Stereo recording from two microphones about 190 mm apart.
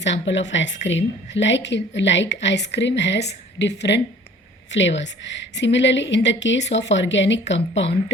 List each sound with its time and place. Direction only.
0.0 s a woman's voice: 70° left (ahead or behind)